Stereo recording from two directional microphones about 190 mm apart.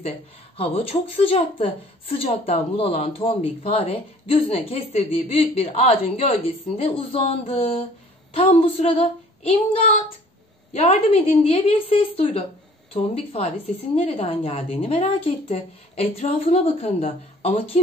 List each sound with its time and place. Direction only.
0.6 s a woman's voice: 30° left (ahead or behind)